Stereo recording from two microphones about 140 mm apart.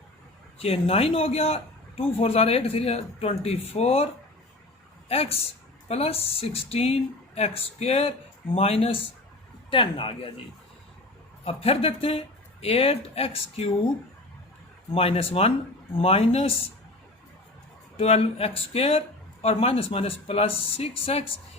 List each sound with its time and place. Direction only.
0.6 s a man's voice: 45° left (ahead or behind)
11.4 s a man's voice: 45° left (ahead or behind)
14.9 s a man's voice: 45° left (ahead or behind)
17.9 s a man's voice: 45° left (ahead or behind)